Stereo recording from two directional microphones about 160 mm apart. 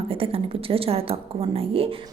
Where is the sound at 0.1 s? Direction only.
35° right (ahead or behind).